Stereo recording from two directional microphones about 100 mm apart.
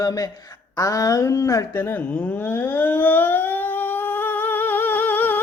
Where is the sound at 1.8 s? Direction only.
20° left (ahead or behind).